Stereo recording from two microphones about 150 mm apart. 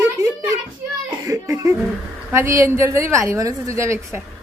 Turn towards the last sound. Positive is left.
turn(degrees=-20)  # may be behind; listen again after turning